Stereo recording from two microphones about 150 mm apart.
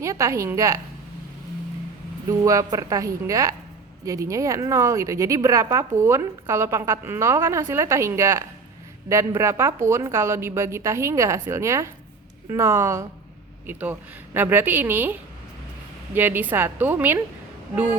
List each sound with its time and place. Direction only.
0.0 s a woman's voice: 20° right (ahead or behind)
2.2 s a woman's voice: 20° right (ahead or behind)